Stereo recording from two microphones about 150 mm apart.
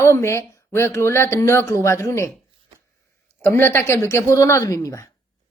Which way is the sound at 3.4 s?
15° left (ahead or behind).